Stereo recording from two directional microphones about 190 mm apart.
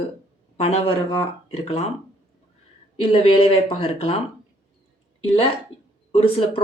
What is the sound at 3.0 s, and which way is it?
Speech, 30° left (ahead or behind).